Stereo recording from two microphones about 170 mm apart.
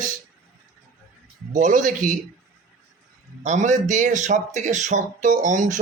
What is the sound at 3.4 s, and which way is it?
Speech, 45° right (ahead or behind).